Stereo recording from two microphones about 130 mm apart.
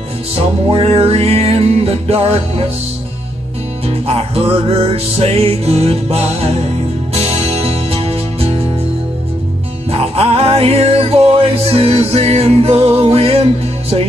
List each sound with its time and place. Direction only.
0.4 s music: 50° right (ahead or behind)
3.8 s music: 50° right (ahead or behind)
9.8 s music: 50° right (ahead or behind)